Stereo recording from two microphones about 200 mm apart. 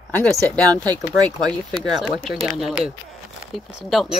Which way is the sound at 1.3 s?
20° right (ahead or behind).